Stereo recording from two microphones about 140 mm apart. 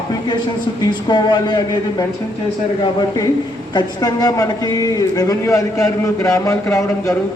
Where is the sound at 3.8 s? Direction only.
30° left (ahead or behind).